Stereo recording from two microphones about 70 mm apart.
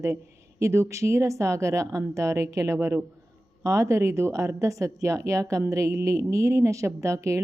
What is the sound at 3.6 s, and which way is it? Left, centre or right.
A woman's voice, right.